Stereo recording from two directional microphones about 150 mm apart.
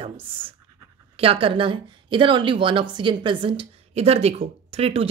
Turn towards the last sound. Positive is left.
turn(degrees=-40)  # may be behind; listen again after turning